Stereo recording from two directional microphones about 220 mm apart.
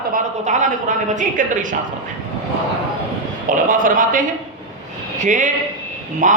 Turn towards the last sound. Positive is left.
turn(degrees=-35)  # may be behind; listen again after turning